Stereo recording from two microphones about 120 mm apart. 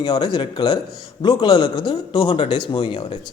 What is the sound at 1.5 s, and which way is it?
A man's voice, 45° left (ahead or behind).